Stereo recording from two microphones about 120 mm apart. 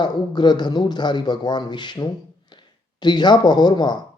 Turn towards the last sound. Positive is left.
turn(degrees=35)  # may be behind; listen again after turning